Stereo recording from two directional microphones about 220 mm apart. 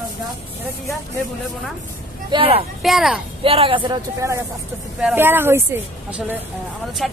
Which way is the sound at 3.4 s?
25° right (ahead or behind).